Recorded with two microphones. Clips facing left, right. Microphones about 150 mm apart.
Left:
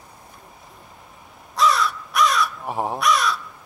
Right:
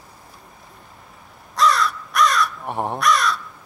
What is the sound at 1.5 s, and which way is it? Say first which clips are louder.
Crow: right 1 dB; centre (ahead or behind).